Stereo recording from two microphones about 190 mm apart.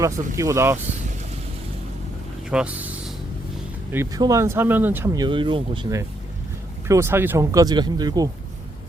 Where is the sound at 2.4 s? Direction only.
5° right (ahead or behind).